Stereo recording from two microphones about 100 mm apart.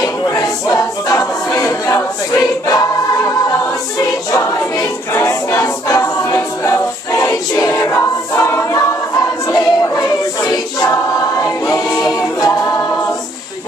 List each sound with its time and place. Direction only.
0.0 s a capella: 35° left (ahead or behind)
4.0 s choir: 30° left (ahead or behind)
5.1 s a capella: 30° left (ahead or behind)
9.5 s choir: 40° left (ahead or behind)
12.2 s a capella: 35° left (ahead or behind)